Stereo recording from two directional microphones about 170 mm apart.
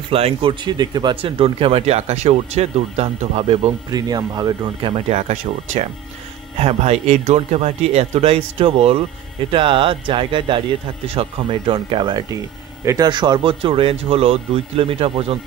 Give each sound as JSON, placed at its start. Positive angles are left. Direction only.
{"t": 0.1, "sound": "speech", "side_deg": -35}
{"t": 3.9, "sound": "speech", "side_deg": -25}
{"t": 4.9, "sound": "speech", "side_deg": -40}